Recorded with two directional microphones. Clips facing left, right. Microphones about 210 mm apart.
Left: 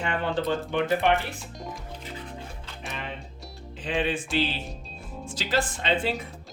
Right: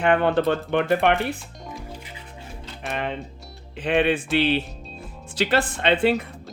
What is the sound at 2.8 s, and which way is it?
Speech, 60° right (ahead or behind).